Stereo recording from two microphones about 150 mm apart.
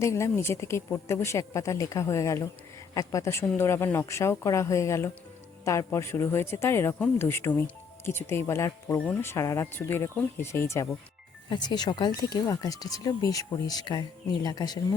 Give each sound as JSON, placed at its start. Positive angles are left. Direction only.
{"t": 0.0, "sound": "speech", "side_deg": 20}
{"t": 11.4, "sound": "speech", "side_deg": 30}